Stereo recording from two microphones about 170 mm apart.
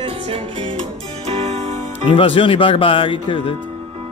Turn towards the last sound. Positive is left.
turn(degrees=30)  # may be behind; listen again after turning